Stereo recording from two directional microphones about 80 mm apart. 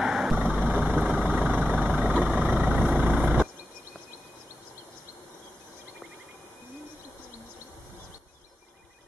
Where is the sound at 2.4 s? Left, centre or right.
Centre.